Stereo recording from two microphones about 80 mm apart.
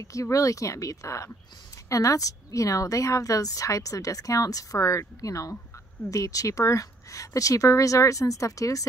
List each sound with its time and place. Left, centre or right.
0.0 s a woman's voice: left